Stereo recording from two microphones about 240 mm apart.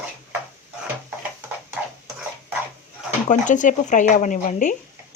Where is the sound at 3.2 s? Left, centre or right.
Left.